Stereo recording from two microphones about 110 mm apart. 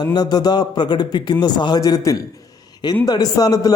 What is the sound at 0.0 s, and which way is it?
A man's voice, 40° left (ahead or behind).